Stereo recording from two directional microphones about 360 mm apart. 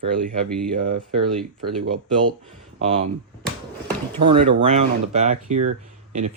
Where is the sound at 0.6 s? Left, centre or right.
Right.